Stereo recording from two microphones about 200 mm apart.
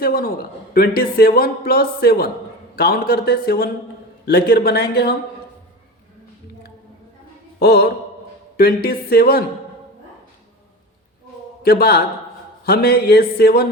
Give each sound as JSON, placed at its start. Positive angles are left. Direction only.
{"t": 0.0, "sound": "a man's voice", "side_deg": 45}
{"t": 7.6, "sound": "a man's voice", "side_deg": 55}
{"t": 11.6, "sound": "a man's voice", "side_deg": 50}